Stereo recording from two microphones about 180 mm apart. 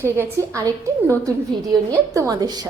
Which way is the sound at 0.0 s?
15° right (ahead or behind).